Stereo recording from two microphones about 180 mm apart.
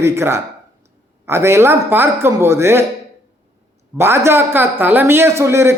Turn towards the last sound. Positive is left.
turn(degrees=-15)  # may be behind; listen again after turning